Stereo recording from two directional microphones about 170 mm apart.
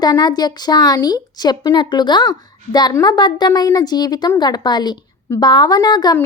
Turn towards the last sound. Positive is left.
turn(degrees=25)  # may be behind; listen again after turning